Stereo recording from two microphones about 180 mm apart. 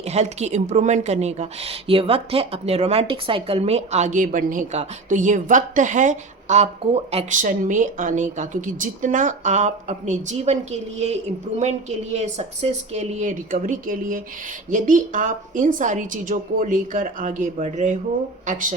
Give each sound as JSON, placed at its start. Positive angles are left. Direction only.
{"t": 0.0, "sound": "a woman's voice", "side_deg": -40}